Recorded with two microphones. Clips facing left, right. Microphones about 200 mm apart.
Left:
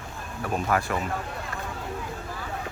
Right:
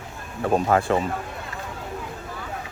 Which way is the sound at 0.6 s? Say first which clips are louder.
Right 4 dB; 30° right (ahead or behind).